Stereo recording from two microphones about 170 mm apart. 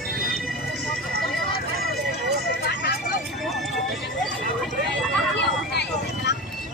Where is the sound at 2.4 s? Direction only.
70° left (ahead or behind).